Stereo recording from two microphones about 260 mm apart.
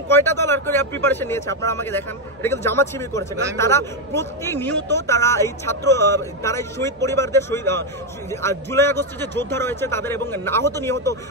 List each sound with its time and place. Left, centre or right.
0.1 s speech: centre